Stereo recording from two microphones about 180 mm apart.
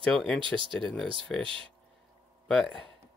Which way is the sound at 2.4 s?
Centre (ahead or behind).